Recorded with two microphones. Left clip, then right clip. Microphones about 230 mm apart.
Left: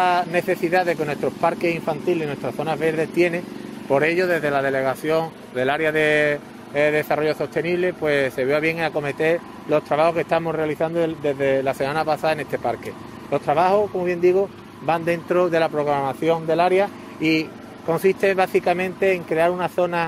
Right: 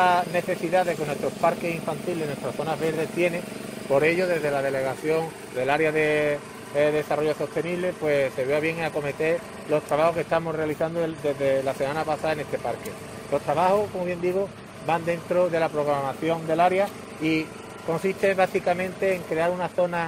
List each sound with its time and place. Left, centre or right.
0.0 s speech: left